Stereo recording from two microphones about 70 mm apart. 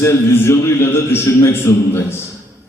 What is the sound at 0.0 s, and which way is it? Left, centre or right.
A man's voice, left.